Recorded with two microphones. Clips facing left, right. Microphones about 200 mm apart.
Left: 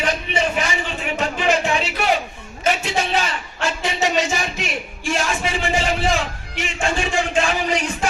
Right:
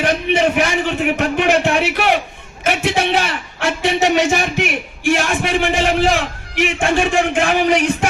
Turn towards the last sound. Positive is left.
turn(degrees=-65)  # may be behind; listen again after turning